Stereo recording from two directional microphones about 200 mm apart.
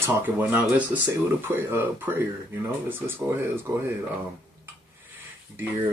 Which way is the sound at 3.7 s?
15° right (ahead or behind).